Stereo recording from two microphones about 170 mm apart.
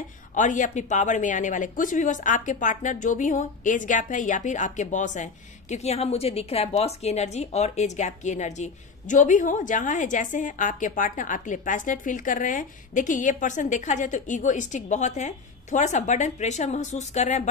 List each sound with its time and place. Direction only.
0.3 s a woman's voice: 45° left (ahead or behind)